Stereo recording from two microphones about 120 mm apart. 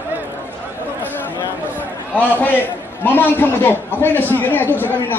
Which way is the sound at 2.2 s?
15° left (ahead or behind).